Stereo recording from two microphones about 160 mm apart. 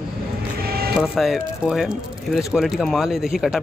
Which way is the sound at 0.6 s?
70° right (ahead or behind).